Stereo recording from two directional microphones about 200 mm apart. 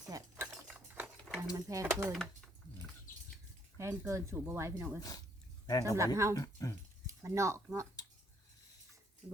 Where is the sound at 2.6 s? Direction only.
20° right (ahead or behind).